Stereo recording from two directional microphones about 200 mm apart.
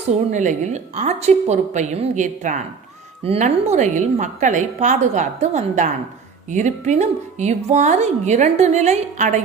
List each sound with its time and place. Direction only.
0.3 s speech: 40° right (ahead or behind)